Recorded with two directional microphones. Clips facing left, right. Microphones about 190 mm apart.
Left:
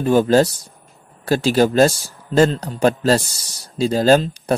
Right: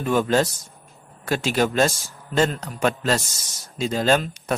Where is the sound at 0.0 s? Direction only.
35° left (ahead or behind).